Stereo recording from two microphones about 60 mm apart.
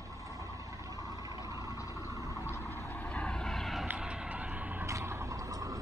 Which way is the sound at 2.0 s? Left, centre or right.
Right.